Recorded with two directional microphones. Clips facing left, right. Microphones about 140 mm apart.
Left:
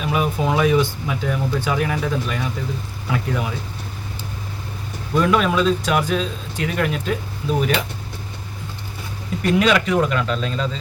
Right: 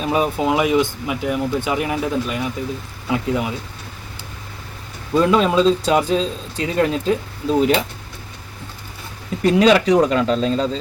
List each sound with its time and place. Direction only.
0.0 s speech: 25° right (ahead or behind)
5.1 s speech: 25° right (ahead or behind)
9.4 s speech: 30° right (ahead or behind)